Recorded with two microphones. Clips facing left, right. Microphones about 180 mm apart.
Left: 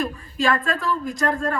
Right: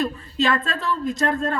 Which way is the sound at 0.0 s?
20° right (ahead or behind).